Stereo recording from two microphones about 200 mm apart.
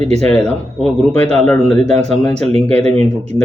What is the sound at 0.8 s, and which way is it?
Speech, centre (ahead or behind).